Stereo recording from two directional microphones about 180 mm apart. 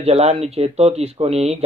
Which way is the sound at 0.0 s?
35° right (ahead or behind).